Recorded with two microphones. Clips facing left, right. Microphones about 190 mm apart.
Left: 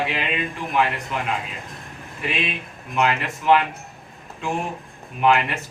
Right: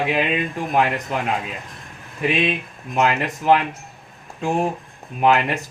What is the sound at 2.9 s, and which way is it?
Speech, 40° right (ahead or behind).